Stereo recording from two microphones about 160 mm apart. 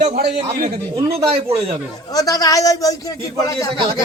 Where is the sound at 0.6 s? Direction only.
35° right (ahead or behind).